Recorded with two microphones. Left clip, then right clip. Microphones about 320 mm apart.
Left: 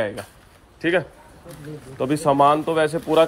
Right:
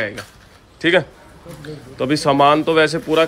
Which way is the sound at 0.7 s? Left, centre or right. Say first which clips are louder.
Right 6 dB; centre.